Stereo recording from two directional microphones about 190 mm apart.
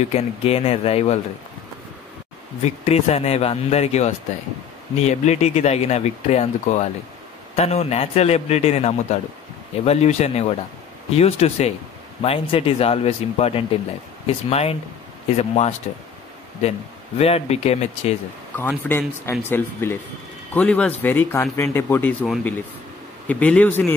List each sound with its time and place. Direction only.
0.0 s speech: 35° left (ahead or behind)
2.6 s speech: 35° left (ahead or behind)
17.2 s speech: 35° left (ahead or behind)
18.6 s speech: 10° left (ahead or behind)